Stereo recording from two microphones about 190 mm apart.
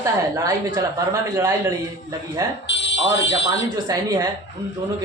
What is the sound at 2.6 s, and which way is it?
Fire alarm, 70° left (ahead or behind).